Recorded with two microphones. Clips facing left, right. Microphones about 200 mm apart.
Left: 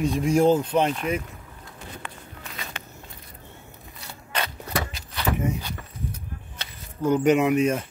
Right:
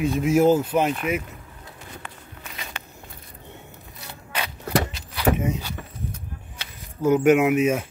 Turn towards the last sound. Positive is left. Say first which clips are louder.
# right 2 dB
turn(degrees=-5)  # may be behind; listen again after turning